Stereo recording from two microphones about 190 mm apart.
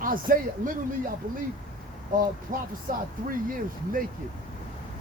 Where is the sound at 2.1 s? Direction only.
45° right (ahead or behind).